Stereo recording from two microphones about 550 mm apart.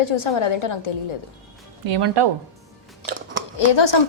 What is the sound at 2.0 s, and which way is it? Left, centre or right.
Speech, right.